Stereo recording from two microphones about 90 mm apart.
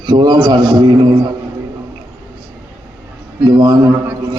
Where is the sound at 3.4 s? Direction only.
60° right (ahead or behind).